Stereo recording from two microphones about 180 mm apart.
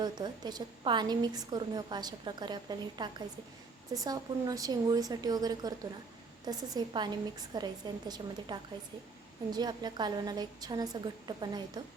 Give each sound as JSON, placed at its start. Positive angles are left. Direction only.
{"t": 0.0, "sound": "a woman's voice", "side_deg": -25}